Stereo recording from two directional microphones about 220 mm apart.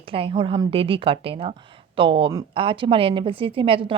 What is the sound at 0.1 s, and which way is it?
Speech, 25° right (ahead or behind).